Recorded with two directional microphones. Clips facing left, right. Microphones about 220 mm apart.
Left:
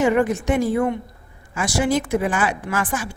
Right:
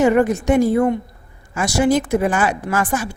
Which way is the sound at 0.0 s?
40° right (ahead or behind).